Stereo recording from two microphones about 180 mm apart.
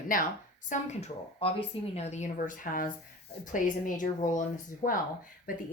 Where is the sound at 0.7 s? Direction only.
40° left (ahead or behind).